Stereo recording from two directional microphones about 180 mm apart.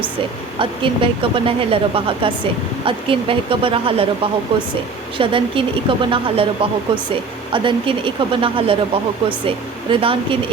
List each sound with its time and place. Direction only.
0.6 s a woman's voice: 30° right (ahead or behind)
7.5 s a woman's voice: 30° right (ahead or behind)